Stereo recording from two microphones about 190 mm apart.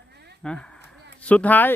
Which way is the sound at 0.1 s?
60° right (ahead or behind).